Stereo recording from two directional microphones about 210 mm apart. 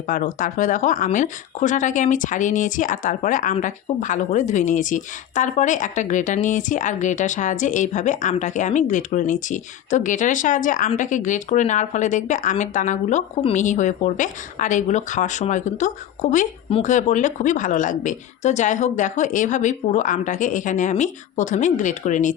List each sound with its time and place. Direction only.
0.1 s speech: 40° left (ahead or behind)